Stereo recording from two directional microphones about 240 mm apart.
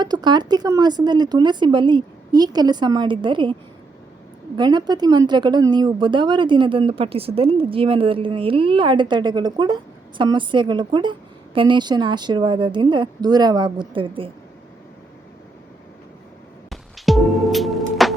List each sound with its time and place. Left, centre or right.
0.0 s speech: centre
4.5 s speech: centre
16.6 s music: centre